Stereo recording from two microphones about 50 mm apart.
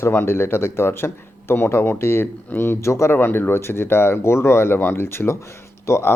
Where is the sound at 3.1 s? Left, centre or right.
Left.